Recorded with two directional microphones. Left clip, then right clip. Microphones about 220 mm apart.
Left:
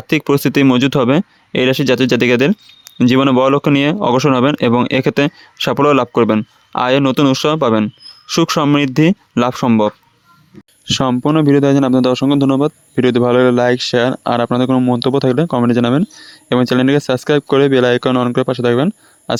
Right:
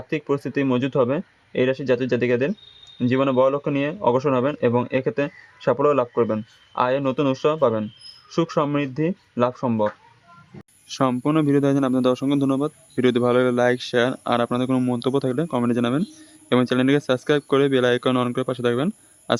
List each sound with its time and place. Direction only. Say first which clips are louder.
0.1 s a man's voice: left 10 dB; 40° left (ahead or behind)